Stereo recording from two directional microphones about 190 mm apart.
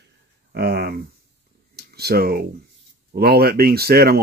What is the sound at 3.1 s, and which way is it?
Speech, 55° right (ahead or behind).